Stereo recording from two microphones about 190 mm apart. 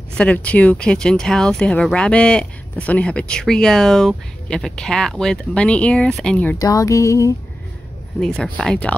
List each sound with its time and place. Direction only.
0.2 s speech: 5° left (ahead or behind)
6.6 s music: 20° left (ahead or behind)
8.2 s speech: 5° left (ahead or behind)